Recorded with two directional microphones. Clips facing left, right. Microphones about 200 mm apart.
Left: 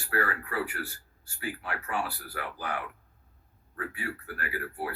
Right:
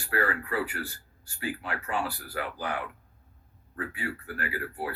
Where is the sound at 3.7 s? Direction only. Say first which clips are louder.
Right 2 dB; 20° right (ahead or behind).